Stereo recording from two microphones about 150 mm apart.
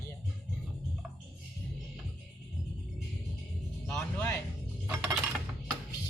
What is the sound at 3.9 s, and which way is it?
Speech, 15° left (ahead or behind).